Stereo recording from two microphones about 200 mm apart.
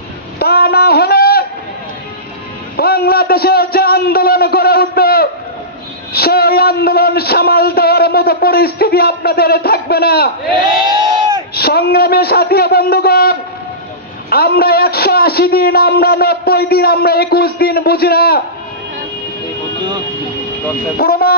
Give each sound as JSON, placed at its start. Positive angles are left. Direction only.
{"t": 0.4, "sound": "a sound", "side_deg": 50}
{"t": 2.7, "sound": "a man's voice", "side_deg": 50}
{"t": 11.5, "sound": "a man's voice", "side_deg": 50}
{"t": 21.0, "sound": "a man's voice", "side_deg": 50}